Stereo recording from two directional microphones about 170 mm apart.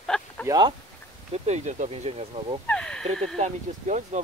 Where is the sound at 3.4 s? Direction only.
45° right (ahead or behind).